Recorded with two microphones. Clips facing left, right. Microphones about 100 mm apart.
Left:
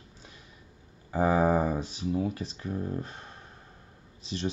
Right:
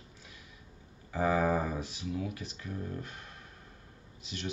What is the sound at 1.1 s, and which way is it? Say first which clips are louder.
Speech: left 4 dB; 35° left (ahead or behind).